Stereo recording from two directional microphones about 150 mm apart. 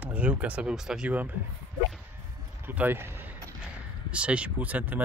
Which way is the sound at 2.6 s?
15° right (ahead or behind).